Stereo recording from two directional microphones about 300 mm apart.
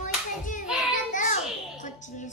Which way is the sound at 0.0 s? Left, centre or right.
Left.